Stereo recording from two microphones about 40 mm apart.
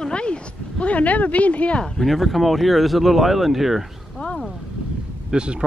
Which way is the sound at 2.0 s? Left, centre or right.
Centre.